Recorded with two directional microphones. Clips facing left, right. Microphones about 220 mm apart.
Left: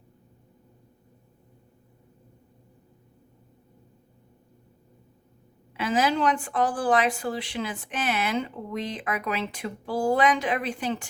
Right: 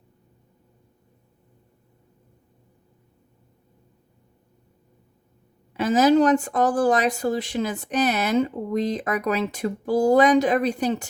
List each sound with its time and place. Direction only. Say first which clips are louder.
5.7 s speech: right 8 dB; 40° right (ahead or behind)